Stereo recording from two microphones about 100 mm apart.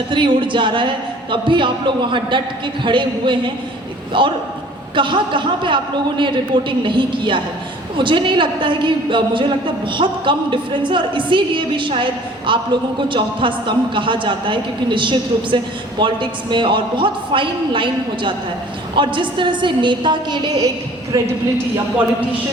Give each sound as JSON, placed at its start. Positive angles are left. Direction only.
{"t": 0.1, "sound": "a man's voice", "side_deg": -55}